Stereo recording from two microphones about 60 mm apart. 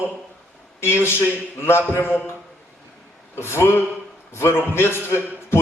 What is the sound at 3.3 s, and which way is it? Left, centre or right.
A man's voice, left.